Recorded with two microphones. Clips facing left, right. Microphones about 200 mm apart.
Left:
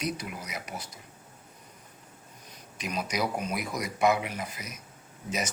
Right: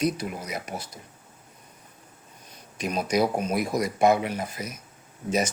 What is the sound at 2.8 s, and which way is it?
Speech, 30° right (ahead or behind).